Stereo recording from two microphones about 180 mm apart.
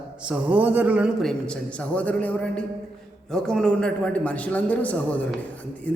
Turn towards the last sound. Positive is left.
turn(degrees=10)  # may be behind; listen again after turning